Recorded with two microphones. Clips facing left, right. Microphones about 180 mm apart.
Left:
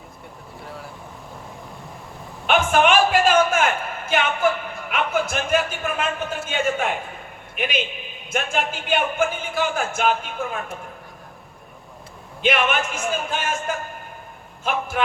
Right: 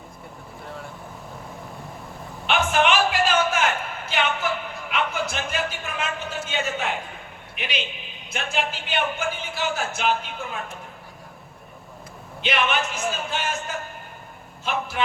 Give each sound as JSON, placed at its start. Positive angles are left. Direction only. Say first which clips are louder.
{"t": 0.6, "sound": "vehicle", "louder": "even", "side_deg": 0}
{"t": 2.5, "sound": "a sound", "louder": "left 3 dB", "side_deg": 50}
{"t": 7.5, "sound": "a man's voice", "louder": "left 6 dB", "side_deg": 50}
{"t": 12.4, "sound": "a man's voice", "louder": "left 3 dB", "side_deg": 50}